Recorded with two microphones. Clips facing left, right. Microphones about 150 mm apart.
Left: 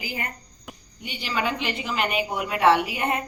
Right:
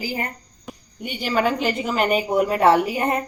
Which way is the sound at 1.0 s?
45° right (ahead or behind).